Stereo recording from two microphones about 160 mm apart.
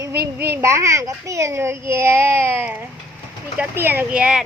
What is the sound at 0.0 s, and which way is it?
A child's voice, 15° right (ahead or behind).